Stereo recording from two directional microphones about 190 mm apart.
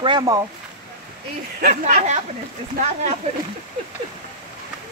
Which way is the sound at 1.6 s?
40° right (ahead or behind).